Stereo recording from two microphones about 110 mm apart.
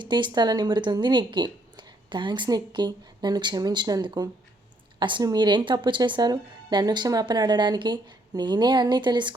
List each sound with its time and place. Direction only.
0.0 s a woman's voice: 45° right (ahead or behind)